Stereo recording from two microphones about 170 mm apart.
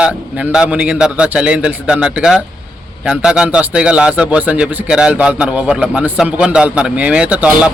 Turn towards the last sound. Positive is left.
turn(degrees=-5)  # may be behind; listen again after turning